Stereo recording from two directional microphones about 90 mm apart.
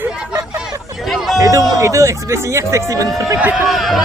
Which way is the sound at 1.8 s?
35° right (ahead or behind).